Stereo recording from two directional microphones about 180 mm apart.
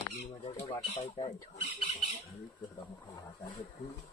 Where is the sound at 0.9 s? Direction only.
30° left (ahead or behind).